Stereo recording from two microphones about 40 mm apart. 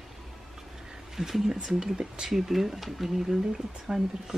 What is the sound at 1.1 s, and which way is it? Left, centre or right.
Speech, centre.